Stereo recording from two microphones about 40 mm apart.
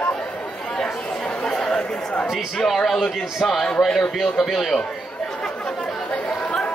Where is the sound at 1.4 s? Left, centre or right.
Centre.